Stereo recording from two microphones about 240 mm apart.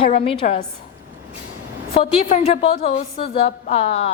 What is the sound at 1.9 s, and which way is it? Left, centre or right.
A woman's voice, left.